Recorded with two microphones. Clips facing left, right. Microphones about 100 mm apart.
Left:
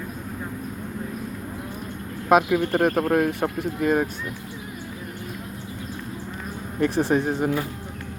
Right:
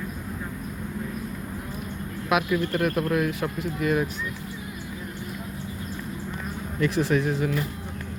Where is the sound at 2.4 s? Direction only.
70° left (ahead or behind).